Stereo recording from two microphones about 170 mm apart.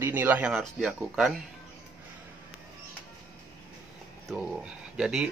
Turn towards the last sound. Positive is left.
turn(degrees=-5)  # may be behind; listen again after turning